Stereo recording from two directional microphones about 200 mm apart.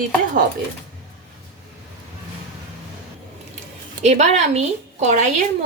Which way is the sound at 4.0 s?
35° right (ahead or behind).